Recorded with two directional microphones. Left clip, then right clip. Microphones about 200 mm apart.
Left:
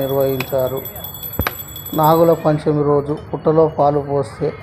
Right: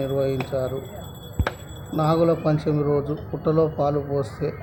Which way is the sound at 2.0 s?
10° left (ahead or behind).